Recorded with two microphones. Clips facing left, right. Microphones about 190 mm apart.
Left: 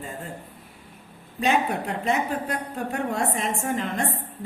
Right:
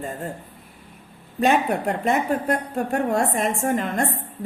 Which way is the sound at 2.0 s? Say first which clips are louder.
Right 4 dB; 50° right (ahead or behind).